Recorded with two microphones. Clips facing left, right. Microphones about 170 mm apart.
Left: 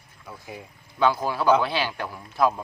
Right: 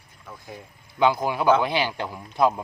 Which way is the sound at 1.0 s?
15° right (ahead or behind).